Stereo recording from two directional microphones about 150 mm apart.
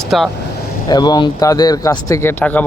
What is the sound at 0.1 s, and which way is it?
Speech, centre (ahead or behind).